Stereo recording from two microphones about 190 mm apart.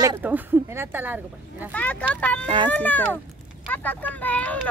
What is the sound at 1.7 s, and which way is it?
Speech, 10° left (ahead or behind).